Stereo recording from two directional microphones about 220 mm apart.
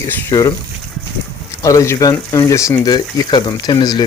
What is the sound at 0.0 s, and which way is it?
Speech, 15° left (ahead or behind).